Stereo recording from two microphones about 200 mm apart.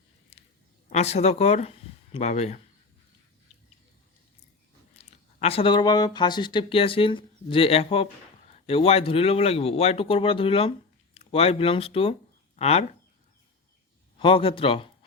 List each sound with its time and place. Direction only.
0.9 s speech: 35° left (ahead or behind)
4.9 s speech: 30° left (ahead or behind)
14.2 s speech: 25° left (ahead or behind)